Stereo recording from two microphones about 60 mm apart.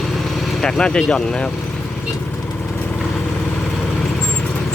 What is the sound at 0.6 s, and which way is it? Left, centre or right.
Speech, centre.